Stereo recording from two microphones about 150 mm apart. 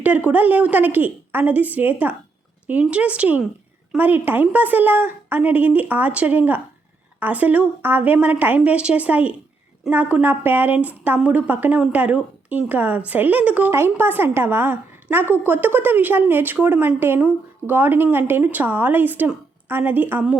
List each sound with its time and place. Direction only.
0.3 s speech: 10° right (ahead or behind)